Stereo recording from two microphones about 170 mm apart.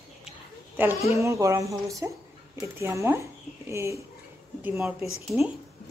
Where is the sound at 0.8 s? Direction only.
10° right (ahead or behind).